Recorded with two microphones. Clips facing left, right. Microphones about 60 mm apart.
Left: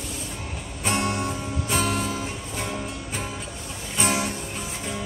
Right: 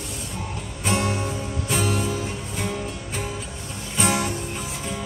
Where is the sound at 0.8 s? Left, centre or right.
Centre.